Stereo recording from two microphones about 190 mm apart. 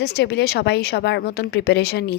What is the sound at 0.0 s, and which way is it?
Speech, 60° left (ahead or behind).